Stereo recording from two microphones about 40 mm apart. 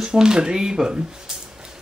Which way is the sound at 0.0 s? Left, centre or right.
Centre.